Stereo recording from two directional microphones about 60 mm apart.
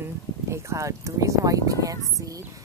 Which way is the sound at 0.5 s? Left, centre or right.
Right.